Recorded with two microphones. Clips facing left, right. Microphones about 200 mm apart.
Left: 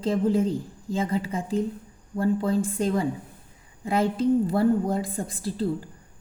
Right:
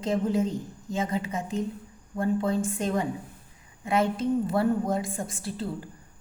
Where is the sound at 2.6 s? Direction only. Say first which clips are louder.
Left 3 dB; 30° left (ahead or behind).